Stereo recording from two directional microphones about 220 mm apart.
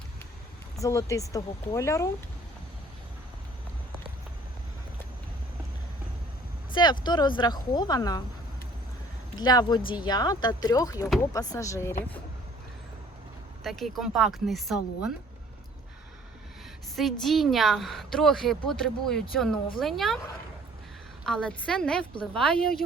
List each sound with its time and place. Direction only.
0.8 s speech: 15° left (ahead or behind)
7.0 s speech: 20° left (ahead or behind)
9.3 s speech: 20° left (ahead or behind)
13.7 s a woman's voice: centre (ahead or behind)
16.9 s a woman's voice: centre (ahead or behind)
21.2 s a woman's voice: 5° left (ahead or behind)